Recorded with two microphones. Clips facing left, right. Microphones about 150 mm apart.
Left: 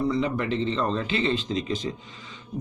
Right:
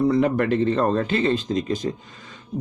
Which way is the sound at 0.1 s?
55° right (ahead or behind).